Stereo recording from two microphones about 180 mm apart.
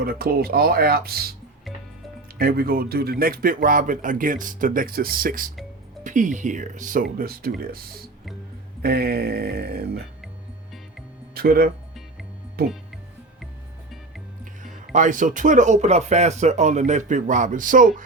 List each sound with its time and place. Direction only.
0.0 s speech: 55° right (ahead or behind)
2.4 s speech: 55° right (ahead or behind)
11.3 s speech: 60° right (ahead or behind)
14.9 s speech: 45° right (ahead or behind)